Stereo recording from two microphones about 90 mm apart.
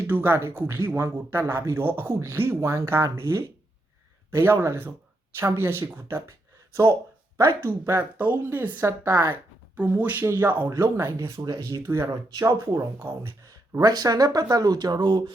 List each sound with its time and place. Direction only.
0.1 s speech: 25° right (ahead or behind)
7.3 s speech: 30° right (ahead or behind)
11.3 s speech: 45° right (ahead or behind)
11.8 s speech: 25° right (ahead or behind)
12.0 s speech: 40° right (ahead or behind)
13.7 s speech: 45° right (ahead or behind); by 15.2 s 60° right (ahead or behind)